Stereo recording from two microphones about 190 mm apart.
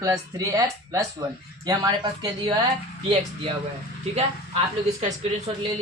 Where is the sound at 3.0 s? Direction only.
30° right (ahead or behind).